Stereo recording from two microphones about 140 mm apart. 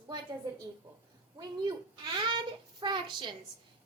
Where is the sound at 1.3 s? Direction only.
30° right (ahead or behind).